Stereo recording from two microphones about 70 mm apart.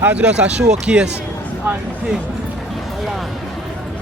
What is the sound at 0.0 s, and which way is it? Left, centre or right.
Speech, centre.